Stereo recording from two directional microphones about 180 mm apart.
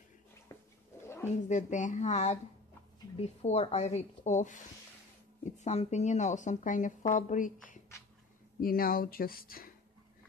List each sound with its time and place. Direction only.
0.5 s cat: 15° left (ahead or behind)
1.5 s speech: 45° left (ahead or behind)
3.4 s speech: 35° left (ahead or behind)
5.6 s a woman's voice: 40° left (ahead or behind); by 9.7 s 55° left (ahead or behind)